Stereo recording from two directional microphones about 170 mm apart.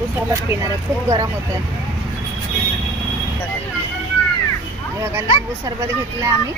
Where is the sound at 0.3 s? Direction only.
15° right (ahead or behind).